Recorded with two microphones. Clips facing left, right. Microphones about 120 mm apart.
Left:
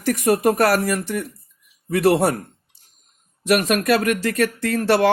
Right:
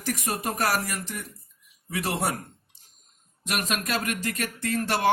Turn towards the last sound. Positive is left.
turn(degrees=65)  # may be behind; listen again after turning